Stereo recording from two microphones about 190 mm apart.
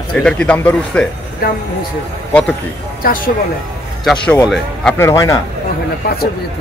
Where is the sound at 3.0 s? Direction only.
45° left (ahead or behind).